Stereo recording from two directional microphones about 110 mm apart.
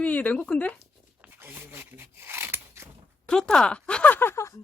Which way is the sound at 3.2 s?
10° left (ahead or behind).